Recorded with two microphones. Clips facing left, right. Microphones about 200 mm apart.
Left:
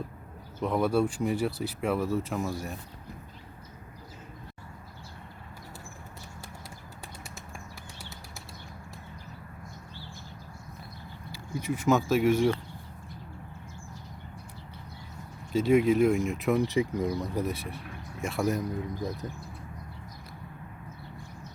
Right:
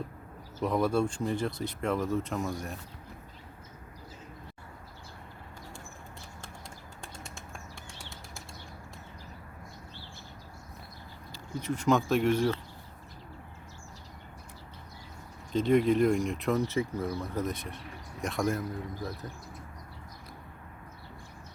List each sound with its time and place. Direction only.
0.6 s speech: 5° left (ahead or behind)
7.3 s a sound: 5° left (ahead or behind)
11.3 s speech: 10° left (ahead or behind)
15.5 s speech: 5° left (ahead or behind)
16.6 s speech: 15° left (ahead or behind)
18.5 s speech: 20° left (ahead or behind)